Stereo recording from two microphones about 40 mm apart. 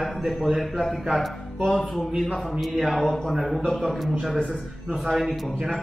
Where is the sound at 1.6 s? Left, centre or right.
Centre.